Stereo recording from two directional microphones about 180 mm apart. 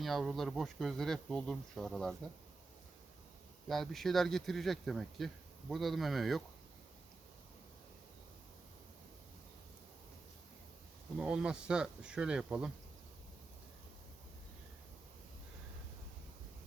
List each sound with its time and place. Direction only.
0.0 s speech: centre (ahead or behind)
3.7 s speech: centre (ahead or behind)
11.2 s speech: 5° right (ahead or behind)